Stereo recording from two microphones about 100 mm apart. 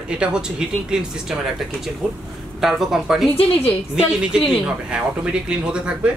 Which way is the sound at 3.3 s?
75° left (ahead or behind).